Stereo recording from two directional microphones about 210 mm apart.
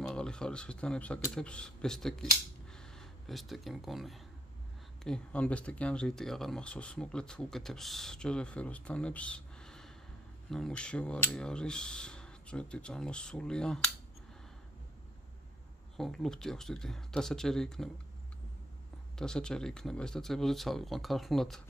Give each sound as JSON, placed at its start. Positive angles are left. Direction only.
{"t": 0.0, "sound": "speech", "side_deg": 5}
{"t": 2.7, "sound": "a sound", "side_deg": 5}
{"t": 5.0, "sound": "speech", "side_deg": 5}
{"t": 16.0, "sound": "speech", "side_deg": 0}
{"t": 19.1, "sound": "speech", "side_deg": 5}